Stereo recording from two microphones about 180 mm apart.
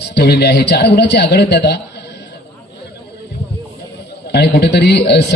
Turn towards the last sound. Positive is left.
turn(degrees=70)  # may be behind; listen again after turning